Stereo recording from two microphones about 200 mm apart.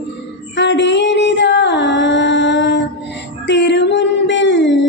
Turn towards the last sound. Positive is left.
turn(degrees=65)  # may be behind; listen again after turning